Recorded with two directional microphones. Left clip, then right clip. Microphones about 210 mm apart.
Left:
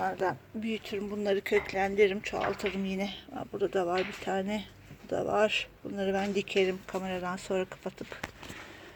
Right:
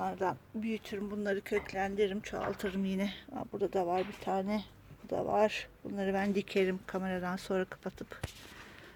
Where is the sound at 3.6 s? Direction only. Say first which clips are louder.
Left 3 dB; centre (ahead or behind).